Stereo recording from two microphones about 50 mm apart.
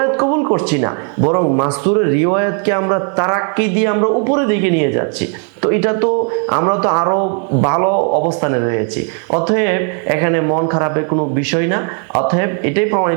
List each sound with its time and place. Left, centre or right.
0.0 s a man's voice: right